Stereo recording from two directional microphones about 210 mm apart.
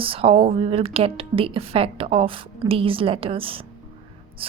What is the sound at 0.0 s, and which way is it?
A woman's voice, 25° right (ahead or behind).